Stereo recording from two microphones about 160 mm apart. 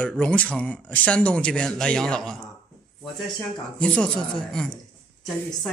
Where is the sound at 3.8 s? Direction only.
5° left (ahead or behind).